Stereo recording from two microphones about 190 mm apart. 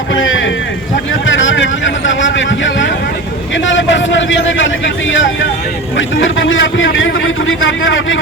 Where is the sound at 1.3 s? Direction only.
85° left.